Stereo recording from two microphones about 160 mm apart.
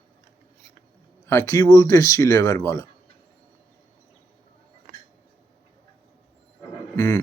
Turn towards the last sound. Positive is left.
turn(degrees=20)  # may be behind; listen again after turning